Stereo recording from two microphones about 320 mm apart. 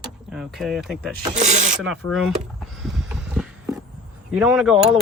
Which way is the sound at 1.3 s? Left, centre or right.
Right.